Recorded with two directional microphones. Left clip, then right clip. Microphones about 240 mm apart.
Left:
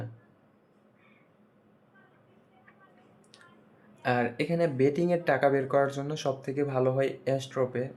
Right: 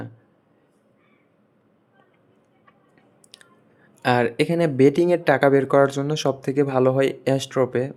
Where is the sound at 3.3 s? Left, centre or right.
Right.